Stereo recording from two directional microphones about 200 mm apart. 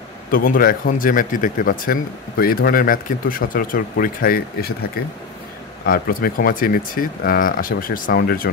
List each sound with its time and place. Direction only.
0.3 s speech: 45° left (ahead or behind)
5.9 s speech: 45° left (ahead or behind)